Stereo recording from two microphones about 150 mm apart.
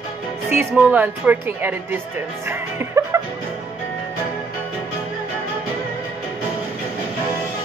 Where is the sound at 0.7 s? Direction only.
5° right (ahead or behind).